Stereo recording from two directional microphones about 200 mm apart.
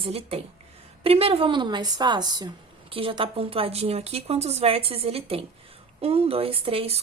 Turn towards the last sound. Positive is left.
turn(degrees=-30)  # may be behind; listen again after turning